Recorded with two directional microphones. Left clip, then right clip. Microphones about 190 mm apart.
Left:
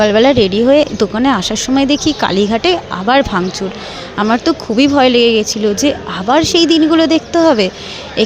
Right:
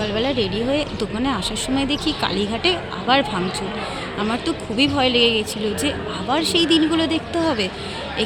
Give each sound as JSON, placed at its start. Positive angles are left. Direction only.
{"t": 0.0, "sound": "speech", "side_deg": 40}